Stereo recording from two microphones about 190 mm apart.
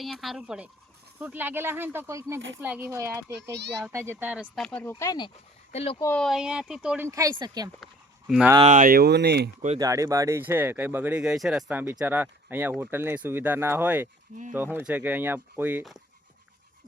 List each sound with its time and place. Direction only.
0.0 s speech: centre (ahead or behind)
4.6 s speech: 10° left (ahead or behind)
5.7 s speech: 30° left (ahead or behind)
6.0 s speech: 10° left (ahead or behind)
6.2 s speech: 5° right (ahead or behind); by 7.7 s 20° right (ahead or behind)
8.3 s speech: 5° right (ahead or behind)
8.7 s speech: 50° right (ahead or behind)
9.7 s speech: 15° right (ahead or behind)